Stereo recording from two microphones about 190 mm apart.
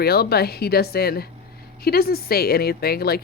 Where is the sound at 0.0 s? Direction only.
55° left (ahead or behind).